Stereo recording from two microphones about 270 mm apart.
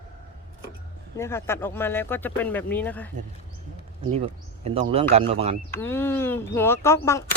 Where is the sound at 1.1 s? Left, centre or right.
Centre.